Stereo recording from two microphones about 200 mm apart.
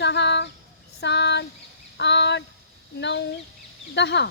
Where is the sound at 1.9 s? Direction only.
60° left (ahead or behind).